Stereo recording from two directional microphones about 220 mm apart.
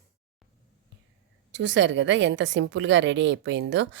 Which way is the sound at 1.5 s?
55° right (ahead or behind).